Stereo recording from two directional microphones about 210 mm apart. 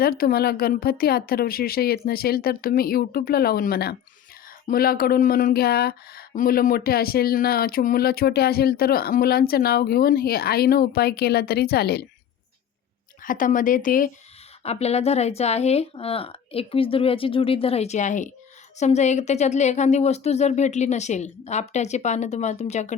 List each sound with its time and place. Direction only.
0.0 s speech: 45° left (ahead or behind)
13.2 s speech: 40° left (ahead or behind)
14.6 s speech: 30° left (ahead or behind)